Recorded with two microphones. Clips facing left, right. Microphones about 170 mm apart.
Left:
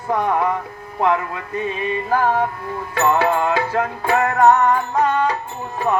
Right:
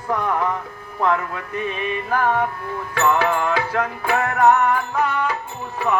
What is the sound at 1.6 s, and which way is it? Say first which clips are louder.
Music: left 2 dB; 30° left (ahead or behind).